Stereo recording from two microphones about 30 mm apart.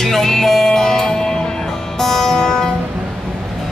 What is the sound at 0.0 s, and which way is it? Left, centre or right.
Music, centre.